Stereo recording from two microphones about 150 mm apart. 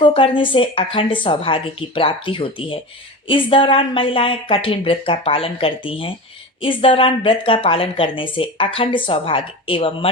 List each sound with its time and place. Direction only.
0.0 s a woman's voice: 35° left (ahead or behind)